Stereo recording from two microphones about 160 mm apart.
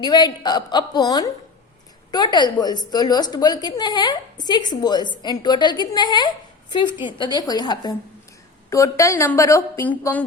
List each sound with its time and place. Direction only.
0.0 s a woman's voice: 25° left (ahead or behind); by 10.2 s 10° left (ahead or behind)